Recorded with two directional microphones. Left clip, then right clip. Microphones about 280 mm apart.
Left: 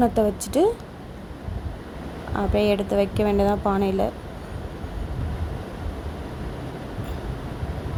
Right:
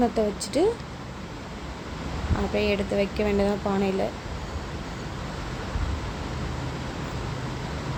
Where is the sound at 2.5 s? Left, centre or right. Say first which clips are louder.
Left 4 dB; centre.